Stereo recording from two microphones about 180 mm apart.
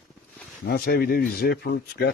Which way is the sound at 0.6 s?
55° left (ahead or behind).